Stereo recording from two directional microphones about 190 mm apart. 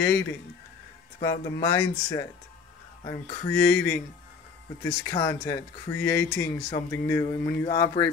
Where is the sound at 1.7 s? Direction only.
15° left (ahead or behind).